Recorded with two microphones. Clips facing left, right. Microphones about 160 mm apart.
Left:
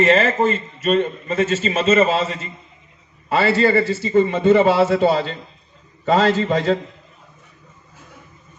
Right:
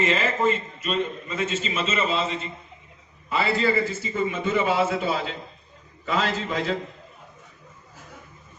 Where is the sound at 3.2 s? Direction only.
80° left.